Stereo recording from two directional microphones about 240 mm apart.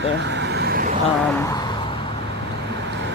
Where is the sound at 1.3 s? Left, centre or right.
Centre.